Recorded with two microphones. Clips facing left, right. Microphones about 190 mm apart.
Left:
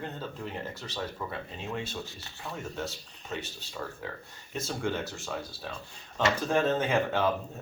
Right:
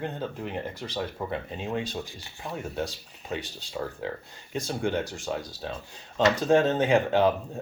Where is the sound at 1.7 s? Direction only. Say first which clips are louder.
Right 4 dB; 15° right (ahead or behind).